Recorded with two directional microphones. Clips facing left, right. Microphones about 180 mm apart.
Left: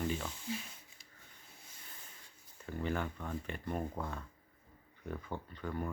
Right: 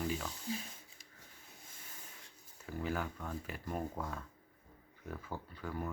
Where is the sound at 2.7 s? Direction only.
5° right (ahead or behind).